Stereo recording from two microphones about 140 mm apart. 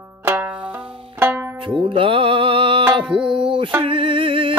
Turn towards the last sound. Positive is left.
turn(degrees=-40)  # may be behind; listen again after turning